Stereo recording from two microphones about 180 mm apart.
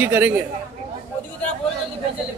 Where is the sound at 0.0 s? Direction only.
10° right (ahead or behind).